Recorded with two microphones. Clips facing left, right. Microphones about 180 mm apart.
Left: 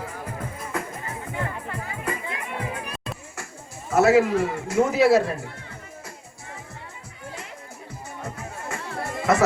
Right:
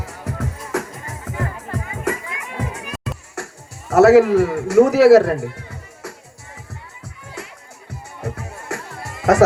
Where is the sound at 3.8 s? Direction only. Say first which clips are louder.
Right 7 dB; 70° right (ahead or behind).